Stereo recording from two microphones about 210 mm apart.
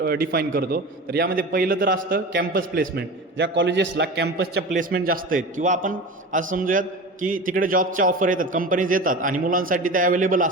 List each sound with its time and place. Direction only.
0.0 s a man's voice: 45° right (ahead or behind)